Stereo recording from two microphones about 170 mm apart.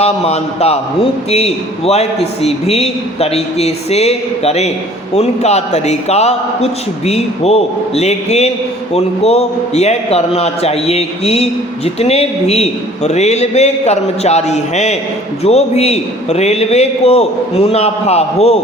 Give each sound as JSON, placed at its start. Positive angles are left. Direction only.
{"t": 0.0, "sound": "a man's voice", "side_deg": 40}